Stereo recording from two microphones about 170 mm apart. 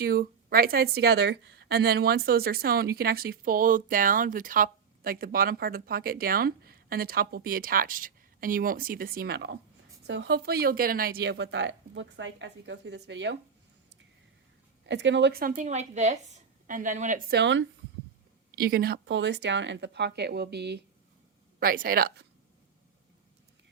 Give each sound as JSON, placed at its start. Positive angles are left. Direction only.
{"t": 0.0, "sound": "speech", "side_deg": -60}
{"t": 14.8, "sound": "a woman's voice", "side_deg": -90}
{"t": 18.5, "sound": "speech", "side_deg": -65}
{"t": 21.6, "sound": "speech", "side_deg": -60}